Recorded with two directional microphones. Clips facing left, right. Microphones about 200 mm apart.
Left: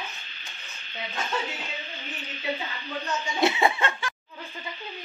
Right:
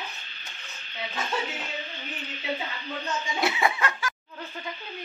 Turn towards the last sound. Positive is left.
turn(degrees=25)  # may be behind; listen again after turning